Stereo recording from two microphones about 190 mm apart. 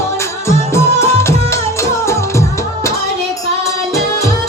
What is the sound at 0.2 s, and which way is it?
Music, 15° left (ahead or behind).